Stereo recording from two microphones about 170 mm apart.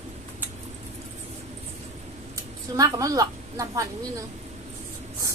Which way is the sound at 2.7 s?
20° right (ahead or behind).